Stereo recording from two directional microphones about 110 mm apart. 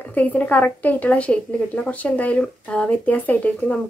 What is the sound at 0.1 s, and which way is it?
A woman's voice, 15° left (ahead or behind).